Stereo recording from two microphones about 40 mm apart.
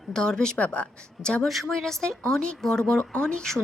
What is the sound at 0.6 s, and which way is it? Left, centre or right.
Speech, left.